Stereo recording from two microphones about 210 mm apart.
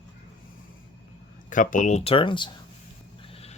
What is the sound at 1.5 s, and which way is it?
Speech, 40° left (ahead or behind).